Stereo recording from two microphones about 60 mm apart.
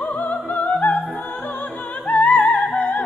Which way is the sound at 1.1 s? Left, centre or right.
Left.